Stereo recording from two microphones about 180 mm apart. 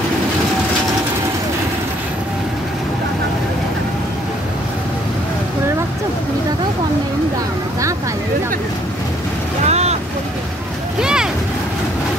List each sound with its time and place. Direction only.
9.7 s vehicle: 35° right (ahead or behind)
11.0 s vehicle: 5° right (ahead or behind)